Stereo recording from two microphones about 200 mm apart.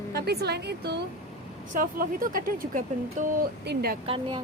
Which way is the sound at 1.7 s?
45° right (ahead or behind).